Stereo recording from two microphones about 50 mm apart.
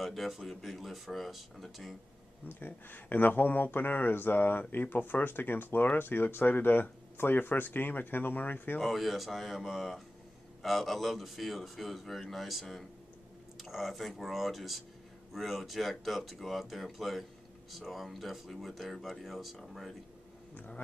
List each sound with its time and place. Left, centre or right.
0.0 s a man's voice: centre
2.4 s speech: left
8.7 s a man's voice: centre
20.5 s speech: left